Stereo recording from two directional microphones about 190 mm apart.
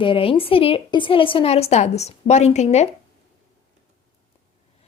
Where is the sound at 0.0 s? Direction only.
25° left (ahead or behind).